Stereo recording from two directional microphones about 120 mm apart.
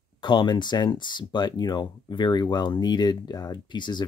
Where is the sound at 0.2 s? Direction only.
40° left (ahead or behind).